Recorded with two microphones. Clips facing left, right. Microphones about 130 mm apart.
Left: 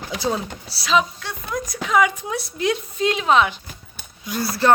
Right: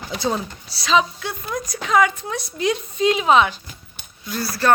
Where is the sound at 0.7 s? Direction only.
5° left (ahead or behind).